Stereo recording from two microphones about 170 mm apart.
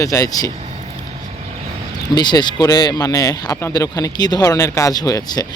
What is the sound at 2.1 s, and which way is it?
Speech, 25° left (ahead or behind).